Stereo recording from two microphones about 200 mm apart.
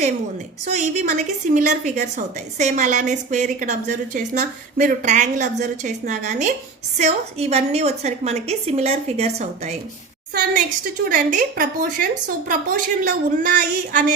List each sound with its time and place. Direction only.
0.7 s a woman's voice: 35° right (ahead or behind)
11.1 s a woman's voice: 45° right (ahead or behind)